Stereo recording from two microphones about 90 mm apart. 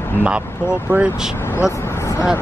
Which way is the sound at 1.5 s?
30° left (ahead or behind).